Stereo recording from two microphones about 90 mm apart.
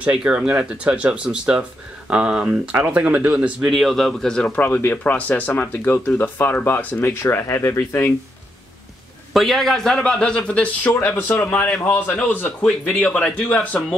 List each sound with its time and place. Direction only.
0.0 s speech: 10° right (ahead or behind)
3.7 s a man's voice: centre (ahead or behind)
4.5 s speech: 15° left (ahead or behind)
9.3 s a man's voice: centre (ahead or behind); by 10.9 s 15° left (ahead or behind)
11.0 s a man's voice: 30° left (ahead or behind)